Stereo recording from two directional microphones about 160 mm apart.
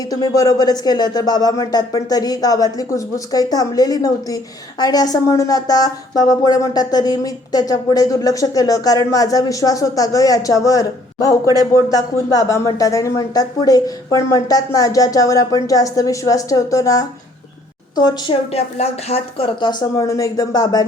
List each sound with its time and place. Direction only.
0.1 s speech: 25° left (ahead or behind)
18.5 s speech: 40° left (ahead or behind); by 20.8 s 25° left (ahead or behind)